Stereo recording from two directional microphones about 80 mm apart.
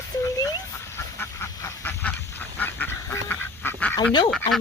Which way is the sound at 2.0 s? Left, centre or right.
Left.